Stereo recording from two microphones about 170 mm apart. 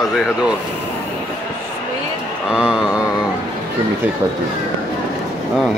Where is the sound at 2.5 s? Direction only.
5° right (ahead or behind).